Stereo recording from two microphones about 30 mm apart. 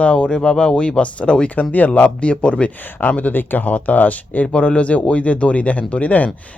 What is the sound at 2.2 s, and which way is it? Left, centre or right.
Speech, left.